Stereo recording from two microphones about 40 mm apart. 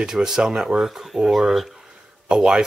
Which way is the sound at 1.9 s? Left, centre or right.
Centre.